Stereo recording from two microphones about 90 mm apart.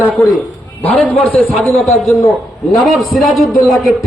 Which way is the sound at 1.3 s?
Centre (ahead or behind).